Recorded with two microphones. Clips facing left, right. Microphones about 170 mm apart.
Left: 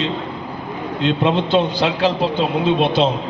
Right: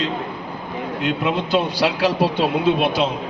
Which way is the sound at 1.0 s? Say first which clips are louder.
Left 5 dB; 25° left (ahead or behind).